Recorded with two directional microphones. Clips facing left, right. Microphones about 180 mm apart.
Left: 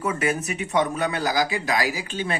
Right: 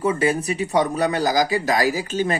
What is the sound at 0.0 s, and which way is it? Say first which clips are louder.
Speech: right 5 dB; 30° right (ahead or behind).